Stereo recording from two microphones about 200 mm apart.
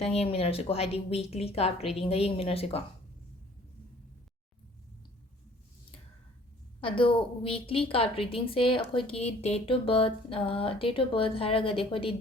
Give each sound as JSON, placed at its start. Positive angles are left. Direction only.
{"t": 0.0, "sound": "a woman's voice", "side_deg": 30}
{"t": 6.8, "sound": "a woman's voice", "side_deg": 25}